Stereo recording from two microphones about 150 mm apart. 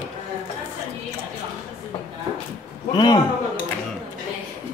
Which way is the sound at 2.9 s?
30° left (ahead or behind).